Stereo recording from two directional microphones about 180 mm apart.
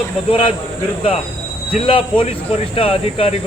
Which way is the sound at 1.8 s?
30° left (ahead or behind).